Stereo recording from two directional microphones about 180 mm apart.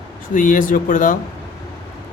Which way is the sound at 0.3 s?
50° left (ahead or behind).